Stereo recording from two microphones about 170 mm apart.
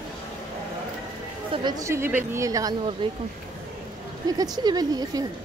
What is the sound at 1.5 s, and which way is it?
A woman's voice, 25° right (ahead or behind).